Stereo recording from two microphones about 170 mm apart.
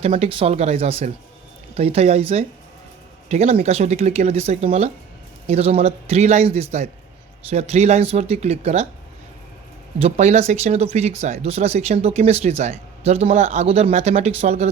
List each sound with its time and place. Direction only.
0.0 s speech: 35° right (ahead or behind)
10.0 s speech: 40° right (ahead or behind)